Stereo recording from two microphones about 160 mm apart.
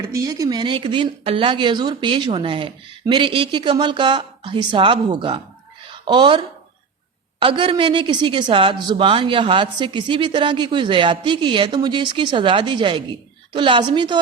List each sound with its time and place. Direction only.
0.0 s a woman's voice: 20° right (ahead or behind)